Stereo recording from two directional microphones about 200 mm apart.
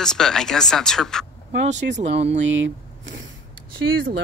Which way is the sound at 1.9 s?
30° right (ahead or behind).